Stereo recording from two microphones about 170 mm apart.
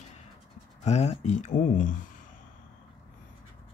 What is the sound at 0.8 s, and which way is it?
Speech, 40° left (ahead or behind).